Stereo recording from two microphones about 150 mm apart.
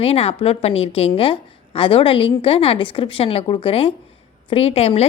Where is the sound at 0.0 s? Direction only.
40° left (ahead or behind).